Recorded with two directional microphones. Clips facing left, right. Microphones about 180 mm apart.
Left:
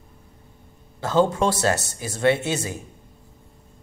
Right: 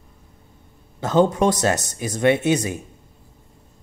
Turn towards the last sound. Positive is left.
turn(degrees=-20)  # may be behind; listen again after turning